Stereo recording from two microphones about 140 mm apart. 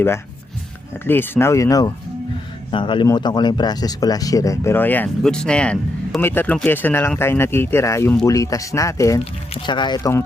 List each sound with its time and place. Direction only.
1.0 s speech: 15° left (ahead or behind)
2.7 s speech: 35° left (ahead or behind)
9.6 s speech: 35° left (ahead or behind)